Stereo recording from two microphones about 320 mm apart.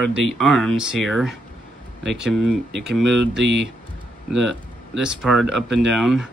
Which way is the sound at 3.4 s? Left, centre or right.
Right.